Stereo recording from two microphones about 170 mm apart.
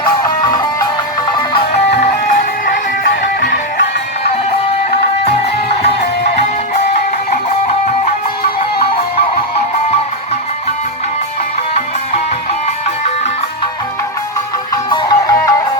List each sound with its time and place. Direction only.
0.0 s music: 25° left (ahead or behind)
2.0 s music: 50° left (ahead or behind)
14.8 s music: 20° left (ahead or behind)